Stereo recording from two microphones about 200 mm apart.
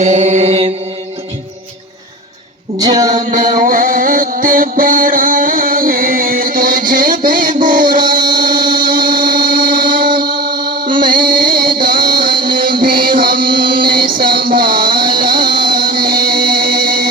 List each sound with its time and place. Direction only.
0.0 s mantra: 35° right (ahead or behind)
2.7 s music: 20° right (ahead or behind)
3.1 s music: 40° right (ahead or behind)
8.6 s a sound: 45° right (ahead or behind)
10.2 s mantra: 20° right (ahead or behind)
11.0 s music: 45° right (ahead or behind)
14.7 s a sound: 25° right (ahead or behind)
15.2 s music: 45° right (ahead or behind)